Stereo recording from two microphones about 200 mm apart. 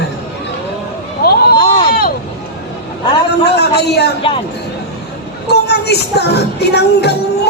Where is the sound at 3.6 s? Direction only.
55° left (ahead or behind).